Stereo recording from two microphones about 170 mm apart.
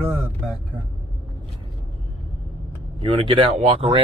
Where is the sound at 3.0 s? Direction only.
35° right (ahead or behind).